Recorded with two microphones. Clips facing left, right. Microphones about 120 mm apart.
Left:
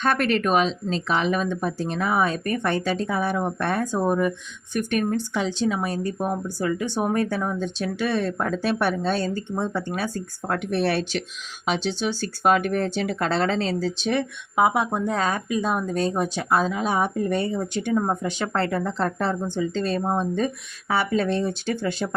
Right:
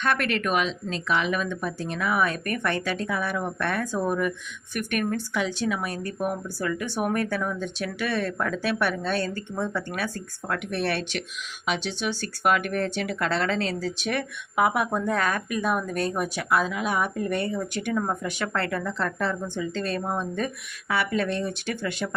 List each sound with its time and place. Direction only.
0.0 s speech: 35° left (ahead or behind)